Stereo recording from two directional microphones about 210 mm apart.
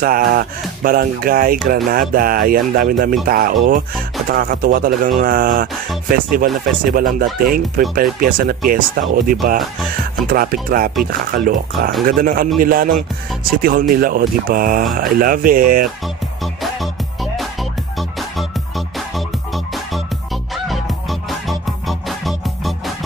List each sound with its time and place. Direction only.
0.0 s speech: 45° right (ahead or behind)
16.6 s music: centre (ahead or behind)